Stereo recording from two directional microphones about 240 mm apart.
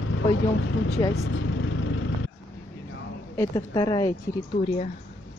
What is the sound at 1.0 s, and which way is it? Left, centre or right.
Speech, centre.